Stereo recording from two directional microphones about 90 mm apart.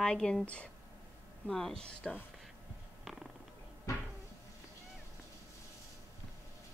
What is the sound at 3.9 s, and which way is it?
Cupboard open or close, 35° left (ahead or behind).